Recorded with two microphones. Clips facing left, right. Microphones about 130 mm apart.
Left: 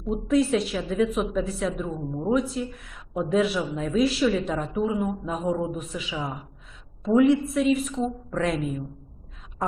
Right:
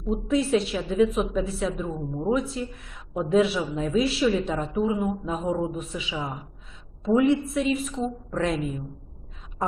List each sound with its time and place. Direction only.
0.0 s speech: centre (ahead or behind)